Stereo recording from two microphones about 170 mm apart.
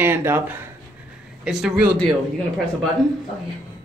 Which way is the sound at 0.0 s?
15° right (ahead or behind).